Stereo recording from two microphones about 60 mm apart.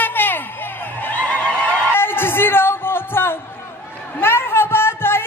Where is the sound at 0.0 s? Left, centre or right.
Left.